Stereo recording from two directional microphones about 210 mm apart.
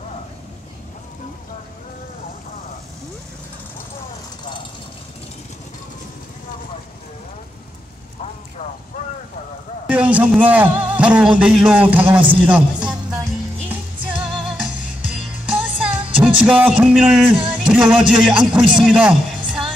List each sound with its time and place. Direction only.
9.8 s a man's voice: 5° right (ahead or behind)
12.2 s music: 5° right (ahead or behind)
17.6 s a man's voice: 5° right (ahead or behind)